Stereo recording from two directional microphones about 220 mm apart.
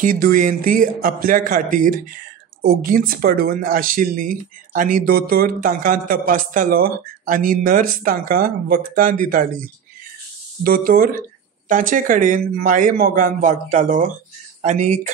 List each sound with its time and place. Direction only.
0.0 s speech: 40° right (ahead or behind)
10.6 s speech: 40° right (ahead or behind)